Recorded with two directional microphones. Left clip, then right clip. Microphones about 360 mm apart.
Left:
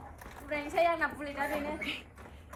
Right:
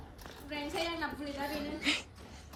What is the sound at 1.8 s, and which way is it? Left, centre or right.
Speech, centre.